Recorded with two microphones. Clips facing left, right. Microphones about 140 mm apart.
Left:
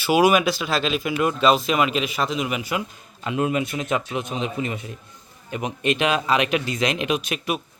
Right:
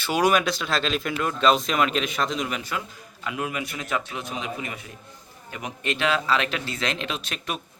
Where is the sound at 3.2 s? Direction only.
25° left (ahead or behind).